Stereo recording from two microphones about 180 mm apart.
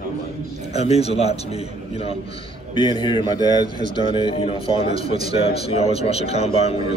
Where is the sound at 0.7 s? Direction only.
35° left (ahead or behind).